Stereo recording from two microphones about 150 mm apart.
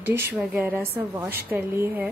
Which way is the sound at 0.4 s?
10° right (ahead or behind).